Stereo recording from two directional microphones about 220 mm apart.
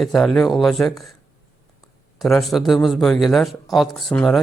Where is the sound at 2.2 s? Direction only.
Centre (ahead or behind).